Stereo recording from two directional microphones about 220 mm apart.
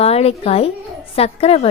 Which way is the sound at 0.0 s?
30° left (ahead or behind).